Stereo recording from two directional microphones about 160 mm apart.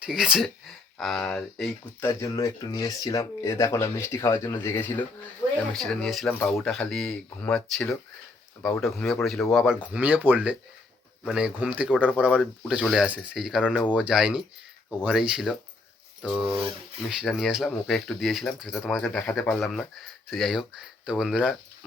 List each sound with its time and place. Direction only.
0.0 s speech: 5° right (ahead or behind)
2.0 s speech: 20° left (ahead or behind)
5.7 s speech: 5° left (ahead or behind)
9.8 s speech: 10° right (ahead or behind)